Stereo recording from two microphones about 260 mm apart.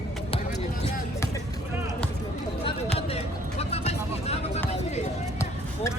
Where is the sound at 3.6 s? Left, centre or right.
Left.